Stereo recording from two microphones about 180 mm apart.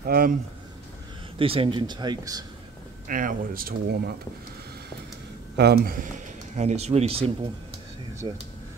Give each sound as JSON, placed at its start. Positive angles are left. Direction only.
{"t": 0.0, "sound": "speech", "side_deg": -55}
{"t": 1.4, "sound": "speech", "side_deg": -30}
{"t": 3.1, "sound": "speech", "side_deg": -50}
{"t": 5.6, "sound": "speech", "side_deg": -60}